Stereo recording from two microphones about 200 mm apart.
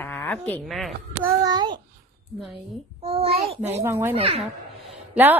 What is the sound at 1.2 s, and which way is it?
Speech, 20° right (ahead or behind).